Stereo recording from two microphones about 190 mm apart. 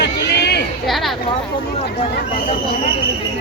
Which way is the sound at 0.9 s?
Centre (ahead or behind).